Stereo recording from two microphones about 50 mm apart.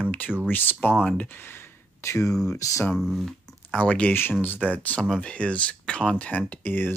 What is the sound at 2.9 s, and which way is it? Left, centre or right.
Speech, centre.